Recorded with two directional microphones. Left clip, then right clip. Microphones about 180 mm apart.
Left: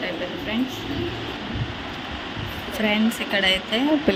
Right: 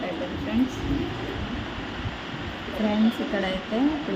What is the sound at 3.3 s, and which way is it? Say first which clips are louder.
Speech: left 10 dB; 45° left (ahead or behind).